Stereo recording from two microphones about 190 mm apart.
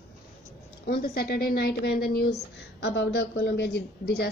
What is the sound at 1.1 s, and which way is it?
A woman's voice, 55° left (ahead or behind).